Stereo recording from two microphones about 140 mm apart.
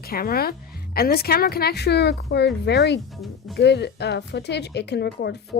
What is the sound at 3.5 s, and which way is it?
Speech, centre (ahead or behind).